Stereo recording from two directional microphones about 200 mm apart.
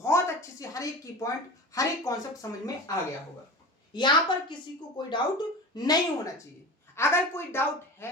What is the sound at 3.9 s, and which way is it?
A woman's voice, 25° left (ahead or behind).